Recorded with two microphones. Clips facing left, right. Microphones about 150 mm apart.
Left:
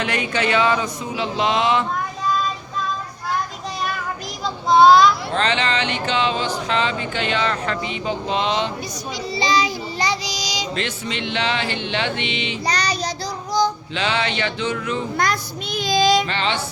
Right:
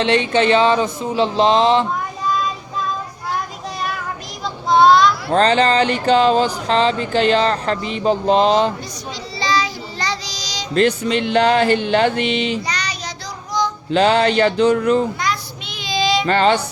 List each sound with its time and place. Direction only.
0.0 s speech: 30° right (ahead or behind)
3.8 s child singing: centre (ahead or behind)
5.3 s speech: 40° right (ahead or behind)
9.3 s child singing: 15° left (ahead or behind)
10.8 s speech: 45° right (ahead or behind)
12.6 s child singing: 35° left (ahead or behind)
13.6 s female singing: 35° left (ahead or behind)
13.9 s speech: 40° right (ahead or behind)
15.2 s child singing: 45° left (ahead or behind)
16.2 s speech: 45° right (ahead or behind)